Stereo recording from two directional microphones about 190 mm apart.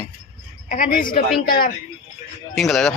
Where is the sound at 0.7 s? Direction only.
45° left (ahead or behind).